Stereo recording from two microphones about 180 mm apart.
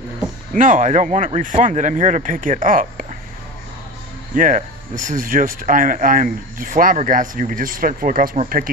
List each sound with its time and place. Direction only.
0.6 s speech: 45° right (ahead or behind)
4.4 s speech: 45° right (ahead or behind)